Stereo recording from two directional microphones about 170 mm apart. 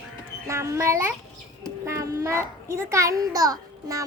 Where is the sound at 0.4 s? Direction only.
15° right (ahead or behind).